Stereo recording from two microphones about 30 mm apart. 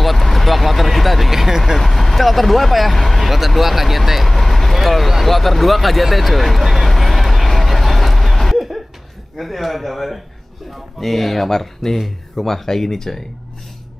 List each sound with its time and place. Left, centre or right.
0.0 s a sound: centre
1.3 s vehicle: centre
1.8 s speech: centre
4.3 s vehicle: centre
4.8 s speech: centre
6.9 s vehicle: centre
9.4 s speech: centre